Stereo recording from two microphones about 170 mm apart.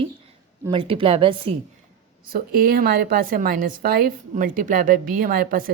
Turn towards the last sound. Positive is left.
turn(degrees=-55)  # may be behind; listen again after turning